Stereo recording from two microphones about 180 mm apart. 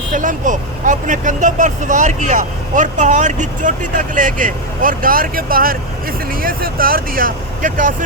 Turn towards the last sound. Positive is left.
turn(degrees=-50)  # may be behind; listen again after turning